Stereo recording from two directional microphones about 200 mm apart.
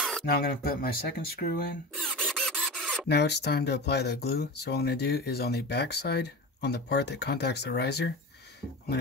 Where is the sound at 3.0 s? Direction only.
55° left (ahead or behind).